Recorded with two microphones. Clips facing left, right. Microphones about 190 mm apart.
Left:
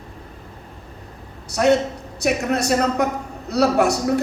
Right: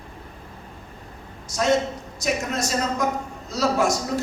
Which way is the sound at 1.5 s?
65° left (ahead or behind).